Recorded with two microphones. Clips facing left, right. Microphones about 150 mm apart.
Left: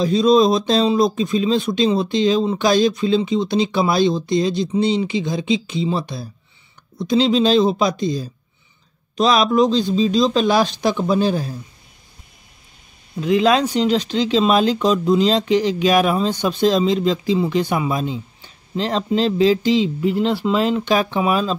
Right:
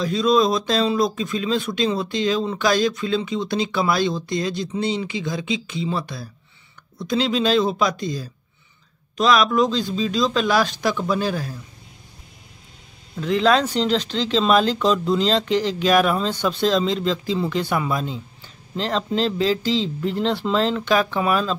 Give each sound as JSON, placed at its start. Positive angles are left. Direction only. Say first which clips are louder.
{"t": 0.0, "sound": "speech", "louder": "left 4 dB", "side_deg": 25}
{"t": 13.1, "sound": "speech", "louder": "left 2 dB", "side_deg": 15}